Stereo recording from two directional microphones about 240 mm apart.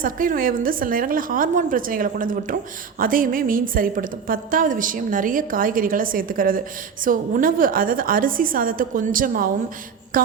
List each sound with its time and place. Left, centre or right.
0.0 s a woman's voice: right